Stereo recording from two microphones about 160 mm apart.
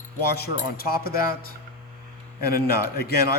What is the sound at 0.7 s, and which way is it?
Speech, 70° left (ahead or behind).